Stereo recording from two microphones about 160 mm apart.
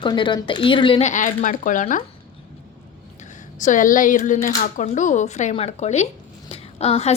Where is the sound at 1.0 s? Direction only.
55° left (ahead or behind).